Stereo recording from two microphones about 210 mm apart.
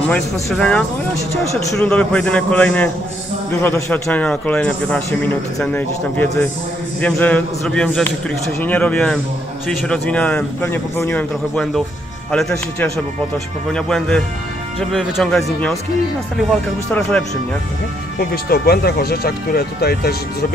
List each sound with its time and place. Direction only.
0.1 s a man's voice: 5° left (ahead or behind)
18.2 s speech: 45° left (ahead or behind)